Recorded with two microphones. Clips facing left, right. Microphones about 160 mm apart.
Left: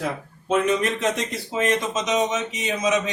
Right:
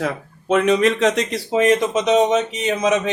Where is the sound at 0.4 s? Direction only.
75° right (ahead or behind).